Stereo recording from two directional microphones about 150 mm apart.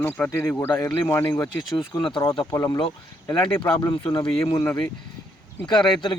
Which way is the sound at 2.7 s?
30° left (ahead or behind).